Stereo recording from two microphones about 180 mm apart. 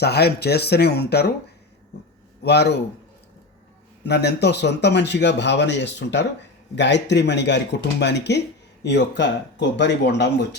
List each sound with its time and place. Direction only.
0.0 s speech: 65° left (ahead or behind)
2.4 s speech: 70° left (ahead or behind)
4.0 s speech: 70° left (ahead or behind)